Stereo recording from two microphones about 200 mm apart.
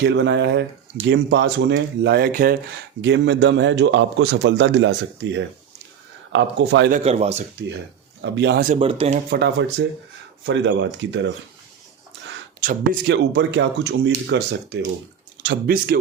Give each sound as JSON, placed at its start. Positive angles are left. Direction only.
{"t": 0.0, "sound": "a man's voice", "side_deg": -60}
{"t": 3.0, "sound": "a man's voice", "side_deg": -60}
{"t": 6.9, "sound": "speech", "side_deg": -30}
{"t": 8.2, "sound": "a man's voice", "side_deg": -60}
{"t": 8.8, "sound": "speech", "side_deg": -30}
{"t": 9.3, "sound": "a man's voice", "side_deg": -55}
{"t": 12.6, "sound": "a man's voice", "side_deg": -50}